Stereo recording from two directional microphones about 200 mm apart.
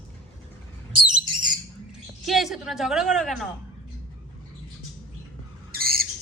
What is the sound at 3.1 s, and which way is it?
Speech, centre (ahead or behind).